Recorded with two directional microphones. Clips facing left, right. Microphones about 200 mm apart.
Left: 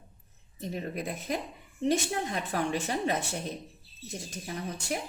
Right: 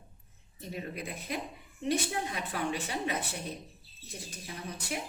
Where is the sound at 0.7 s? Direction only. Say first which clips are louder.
Left 4 dB; 45° left (ahead or behind).